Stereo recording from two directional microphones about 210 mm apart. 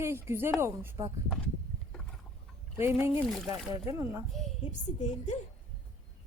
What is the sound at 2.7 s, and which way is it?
Speech, 10° right (ahead or behind).